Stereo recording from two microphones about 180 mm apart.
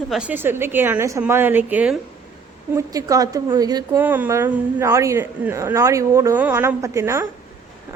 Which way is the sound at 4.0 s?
10° right (ahead or behind).